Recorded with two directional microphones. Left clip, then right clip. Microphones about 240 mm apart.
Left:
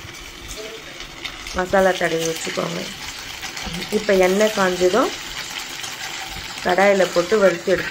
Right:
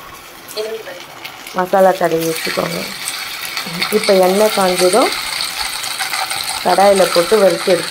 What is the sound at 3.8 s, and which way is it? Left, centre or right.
Speech, right.